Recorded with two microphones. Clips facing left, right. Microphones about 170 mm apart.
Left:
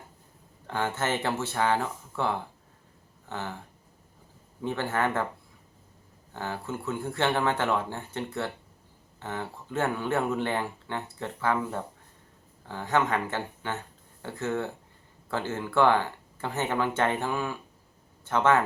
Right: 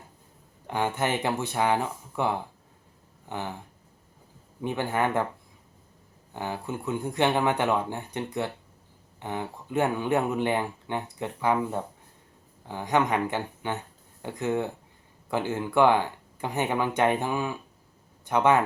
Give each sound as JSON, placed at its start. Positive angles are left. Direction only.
{"t": 0.7, "sound": "speech", "side_deg": -15}
{"t": 4.6, "sound": "speech", "side_deg": -15}
{"t": 6.3, "sound": "speech", "side_deg": -15}